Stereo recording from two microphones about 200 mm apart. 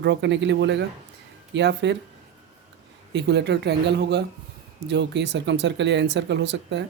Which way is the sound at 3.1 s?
60° right (ahead or behind).